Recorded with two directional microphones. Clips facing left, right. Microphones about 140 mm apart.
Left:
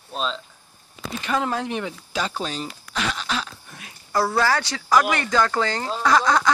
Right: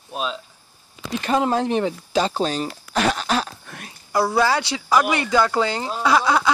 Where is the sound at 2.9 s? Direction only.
45° right (ahead or behind).